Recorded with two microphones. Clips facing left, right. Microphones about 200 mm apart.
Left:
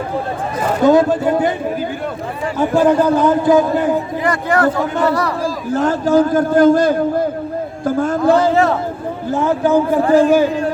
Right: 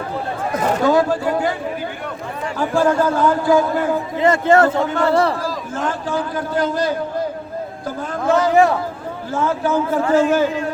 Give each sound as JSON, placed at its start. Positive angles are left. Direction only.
{"t": 0.9, "sound": "a man's voice", "side_deg": 20}
{"t": 2.6, "sound": "a man's voice", "side_deg": 20}
{"t": 4.2, "sound": "a man's voice", "side_deg": -25}
{"t": 5.7, "sound": "a man's voice", "side_deg": 40}
{"t": 8.3, "sound": "a man's voice", "side_deg": 30}
{"t": 9.3, "sound": "a man's voice", "side_deg": 15}
{"t": 10.0, "sound": "a man's voice", "side_deg": 35}